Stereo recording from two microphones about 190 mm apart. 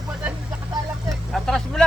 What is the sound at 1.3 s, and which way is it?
Speech, centre (ahead or behind).